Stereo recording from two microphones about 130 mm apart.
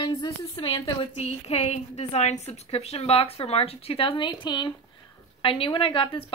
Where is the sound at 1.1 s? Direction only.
55° left (ahead or behind).